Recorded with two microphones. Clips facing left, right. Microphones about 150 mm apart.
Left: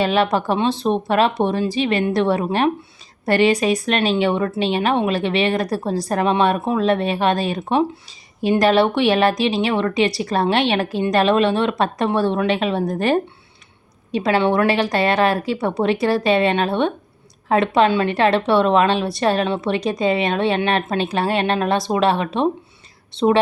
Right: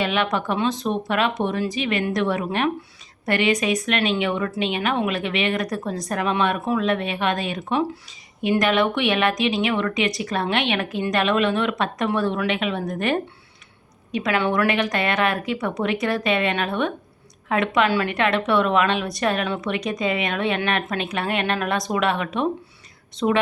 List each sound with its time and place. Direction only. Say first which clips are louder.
0.0 s a woman's voice: left 5 dB; 35° left (ahead or behind)